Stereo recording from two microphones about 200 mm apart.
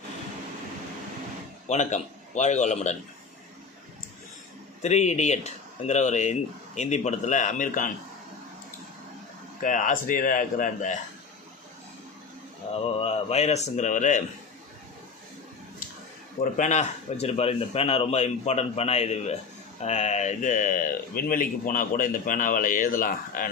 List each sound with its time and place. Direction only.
1.6 s a man's voice: 35° left (ahead or behind)
4.8 s speech: 35° left (ahead or behind)
9.6 s speech: 40° left (ahead or behind)
12.7 s speech: 30° left (ahead or behind)
16.4 s speech: 35° left (ahead or behind)